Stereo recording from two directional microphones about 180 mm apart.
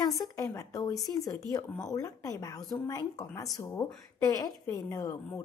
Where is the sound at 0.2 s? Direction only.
20° left (ahead or behind).